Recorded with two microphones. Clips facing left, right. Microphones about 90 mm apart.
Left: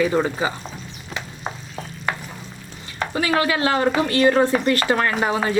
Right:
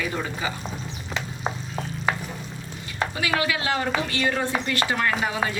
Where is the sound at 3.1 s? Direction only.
40° left (ahead or behind).